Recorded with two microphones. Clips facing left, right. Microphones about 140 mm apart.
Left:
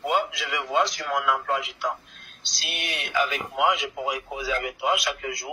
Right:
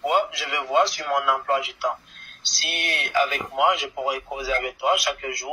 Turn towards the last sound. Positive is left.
turn(degrees=0)  # may be behind; listen again after turning